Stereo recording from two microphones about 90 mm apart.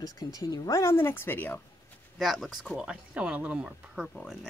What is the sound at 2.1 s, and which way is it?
Speech, centre (ahead or behind).